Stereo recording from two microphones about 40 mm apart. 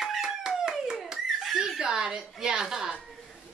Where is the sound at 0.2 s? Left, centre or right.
Centre.